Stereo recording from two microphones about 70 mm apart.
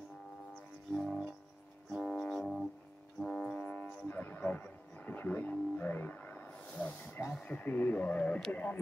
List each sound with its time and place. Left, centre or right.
0.9 s music: centre
2.3 s music: centre
3.2 s music: centre
3.6 s music: left
4.1 s wild animals: left
7.4 s speech: left